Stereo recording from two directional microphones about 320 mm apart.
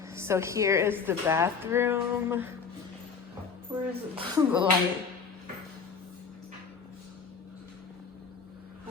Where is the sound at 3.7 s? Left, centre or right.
Centre.